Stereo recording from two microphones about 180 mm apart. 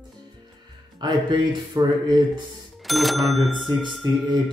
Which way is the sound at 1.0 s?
25° right (ahead or behind).